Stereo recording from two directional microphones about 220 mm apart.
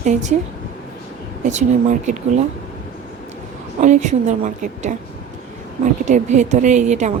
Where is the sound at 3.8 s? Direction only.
35° right (ahead or behind).